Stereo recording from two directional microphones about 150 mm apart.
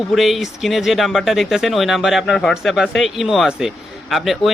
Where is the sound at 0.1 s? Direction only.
Centre (ahead or behind).